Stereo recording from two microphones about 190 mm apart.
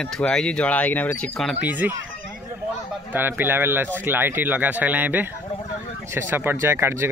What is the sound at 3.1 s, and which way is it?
Speech, 10° right (ahead or behind).